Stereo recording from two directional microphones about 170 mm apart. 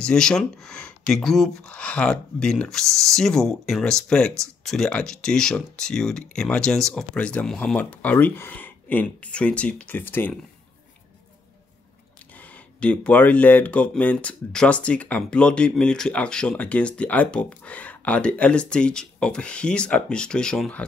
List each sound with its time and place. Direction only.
0.0 s speech: 5° left (ahead or behind)
12.4 s speech: 10° left (ahead or behind)